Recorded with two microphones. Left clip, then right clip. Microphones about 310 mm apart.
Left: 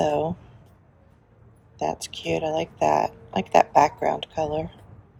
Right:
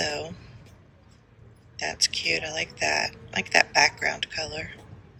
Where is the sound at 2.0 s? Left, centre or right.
Centre.